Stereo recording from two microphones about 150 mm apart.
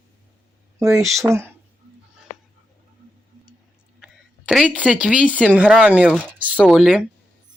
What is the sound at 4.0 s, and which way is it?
A woman's voice, 5° right (ahead or behind).